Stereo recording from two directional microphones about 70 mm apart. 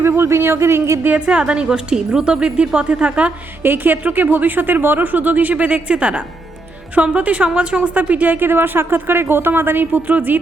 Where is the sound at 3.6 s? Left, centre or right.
Right.